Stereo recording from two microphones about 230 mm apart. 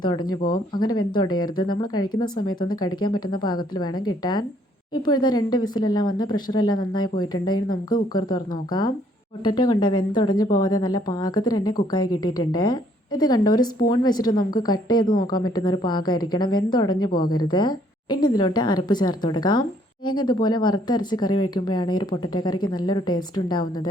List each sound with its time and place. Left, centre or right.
0.0 s a woman's voice: centre